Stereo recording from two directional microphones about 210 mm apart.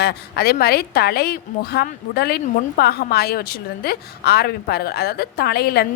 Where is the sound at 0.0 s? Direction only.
50° left (ahead or behind).